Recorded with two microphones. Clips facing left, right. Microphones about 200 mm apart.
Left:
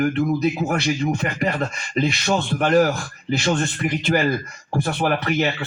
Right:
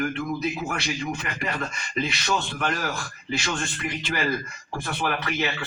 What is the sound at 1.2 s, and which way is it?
Speech, 45° left (ahead or behind).